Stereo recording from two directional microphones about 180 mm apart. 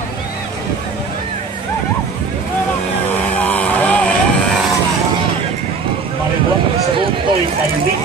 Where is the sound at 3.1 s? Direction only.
10° left (ahead or behind).